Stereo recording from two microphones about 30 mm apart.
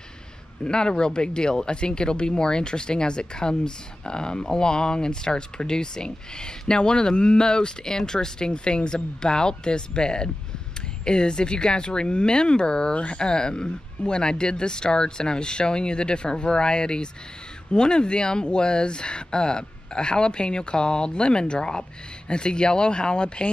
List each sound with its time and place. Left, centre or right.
0.7 s speech: left
12.9 s speech: left
13.2 s speech: left